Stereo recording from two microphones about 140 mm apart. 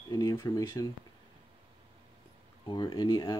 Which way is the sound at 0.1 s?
25° left (ahead or behind).